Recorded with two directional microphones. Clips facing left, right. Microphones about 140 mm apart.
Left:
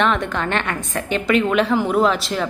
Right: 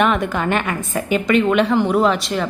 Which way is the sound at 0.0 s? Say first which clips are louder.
Right 2 dB; 5° right (ahead or behind).